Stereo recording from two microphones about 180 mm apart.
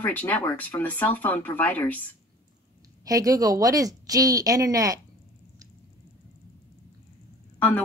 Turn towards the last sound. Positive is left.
turn(degrees=10)  # may be behind; listen again after turning